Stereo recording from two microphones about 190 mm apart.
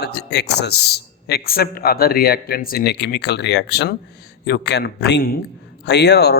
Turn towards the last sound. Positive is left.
turn(degrees=60)  # may be behind; listen again after turning